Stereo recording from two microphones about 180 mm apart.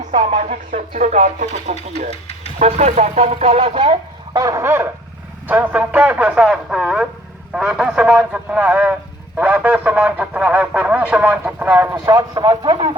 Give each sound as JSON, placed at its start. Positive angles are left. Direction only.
{"t": 0.2, "sound": "speech", "side_deg": -45}
{"t": 4.4, "sound": "a man's voice", "side_deg": -15}